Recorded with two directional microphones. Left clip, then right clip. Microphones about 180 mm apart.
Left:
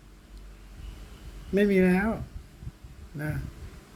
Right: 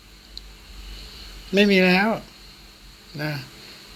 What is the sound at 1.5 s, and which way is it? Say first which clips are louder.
Speech: right 6 dB; 10° right (ahead or behind).